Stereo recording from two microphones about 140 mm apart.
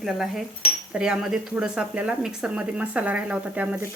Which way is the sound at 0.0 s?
Centre (ahead or behind).